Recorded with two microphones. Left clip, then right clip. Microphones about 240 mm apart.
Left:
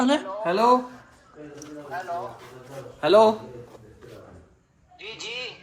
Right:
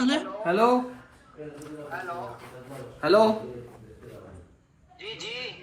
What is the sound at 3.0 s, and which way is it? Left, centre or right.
Speech, left.